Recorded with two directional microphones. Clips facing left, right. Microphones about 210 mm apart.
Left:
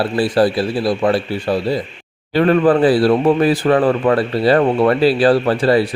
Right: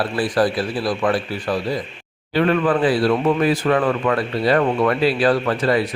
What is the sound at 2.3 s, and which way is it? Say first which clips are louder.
Speech: left 5 dB; 40° left (ahead or behind).